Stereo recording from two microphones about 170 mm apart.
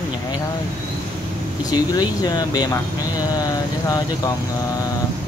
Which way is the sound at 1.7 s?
25° left (ahead or behind).